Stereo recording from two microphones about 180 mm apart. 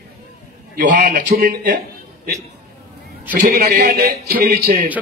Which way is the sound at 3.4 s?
60° right (ahead or behind).